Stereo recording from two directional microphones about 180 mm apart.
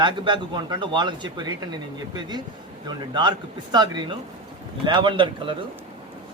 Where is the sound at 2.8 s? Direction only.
25° right (ahead or behind).